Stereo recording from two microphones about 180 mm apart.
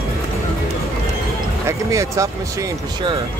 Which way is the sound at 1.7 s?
15° right (ahead or behind).